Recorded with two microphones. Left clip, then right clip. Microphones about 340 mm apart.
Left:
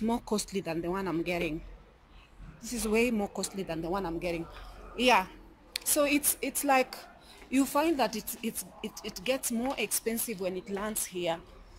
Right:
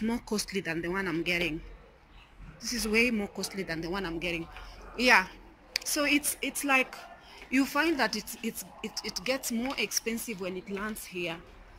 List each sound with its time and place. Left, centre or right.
0.3 s speech: centre
2.6 s a woman's voice: centre